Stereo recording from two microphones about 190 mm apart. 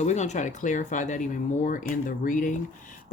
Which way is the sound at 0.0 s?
35° left (ahead or behind).